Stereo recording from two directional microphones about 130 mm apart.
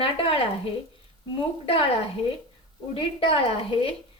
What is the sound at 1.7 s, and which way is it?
Speech, 45° left (ahead or behind).